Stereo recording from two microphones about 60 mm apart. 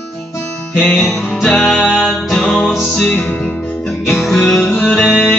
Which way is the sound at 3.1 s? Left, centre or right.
Left.